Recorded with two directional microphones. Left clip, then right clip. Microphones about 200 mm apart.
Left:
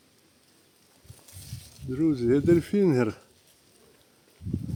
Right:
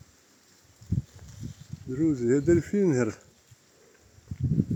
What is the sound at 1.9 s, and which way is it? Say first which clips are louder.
Speech: left 1 dB; 10° left (ahead or behind).